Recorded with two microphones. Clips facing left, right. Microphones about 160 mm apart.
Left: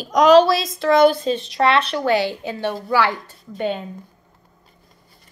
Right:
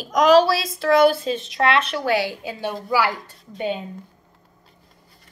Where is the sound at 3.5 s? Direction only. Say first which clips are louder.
Left 2 dB; 50° left (ahead or behind).